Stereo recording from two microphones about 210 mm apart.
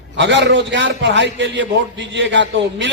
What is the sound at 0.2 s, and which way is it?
A man's voice, 55° right (ahead or behind).